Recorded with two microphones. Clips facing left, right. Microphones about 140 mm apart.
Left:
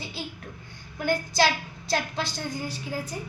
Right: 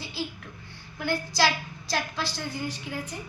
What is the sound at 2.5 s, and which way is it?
Speech, 35° left (ahead or behind).